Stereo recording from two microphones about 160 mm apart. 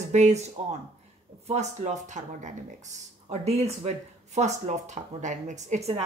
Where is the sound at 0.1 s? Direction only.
45° right (ahead or behind).